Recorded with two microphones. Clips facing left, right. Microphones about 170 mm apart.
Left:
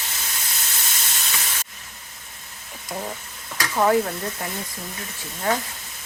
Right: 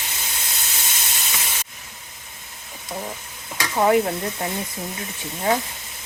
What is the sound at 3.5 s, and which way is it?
Stir, 20° right (ahead or behind).